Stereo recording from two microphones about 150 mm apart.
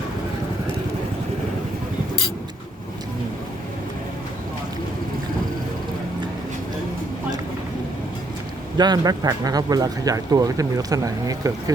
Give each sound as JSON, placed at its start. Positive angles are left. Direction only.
{"t": 8.8, "sound": "speech", "side_deg": -25}